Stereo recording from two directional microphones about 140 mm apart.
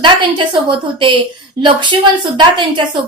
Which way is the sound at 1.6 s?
35° right (ahead or behind).